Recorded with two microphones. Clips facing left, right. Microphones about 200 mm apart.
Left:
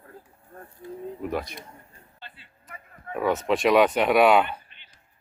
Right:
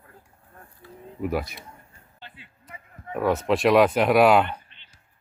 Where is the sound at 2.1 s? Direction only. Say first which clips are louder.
Right 2 dB; 15° right (ahead or behind).